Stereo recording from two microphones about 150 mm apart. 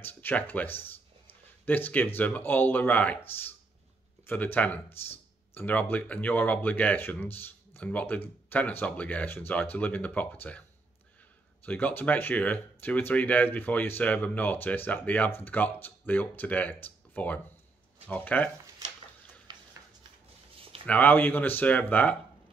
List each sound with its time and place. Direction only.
0.0 s speech: 10° left (ahead or behind)
20.8 s speech: 10° left (ahead or behind)